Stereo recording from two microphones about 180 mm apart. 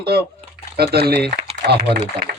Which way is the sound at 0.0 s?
60° right (ahead or behind).